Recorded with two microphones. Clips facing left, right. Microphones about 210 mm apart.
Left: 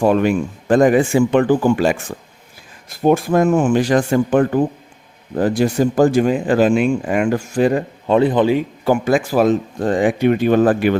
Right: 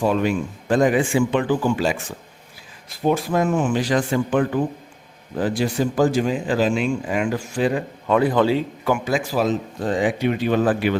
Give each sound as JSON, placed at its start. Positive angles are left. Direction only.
{"t": 0.0, "sound": "speech", "side_deg": 55}
{"t": 8.0, "sound": "a man's voice", "side_deg": 25}
{"t": 9.0, "sound": "speech", "side_deg": 55}